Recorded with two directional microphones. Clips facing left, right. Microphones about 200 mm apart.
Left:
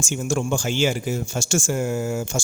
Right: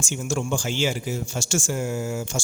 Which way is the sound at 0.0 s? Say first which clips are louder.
Left 3 dB; 50° left (ahead or behind).